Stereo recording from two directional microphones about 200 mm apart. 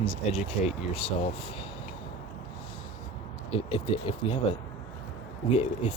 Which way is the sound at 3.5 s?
25° left (ahead or behind).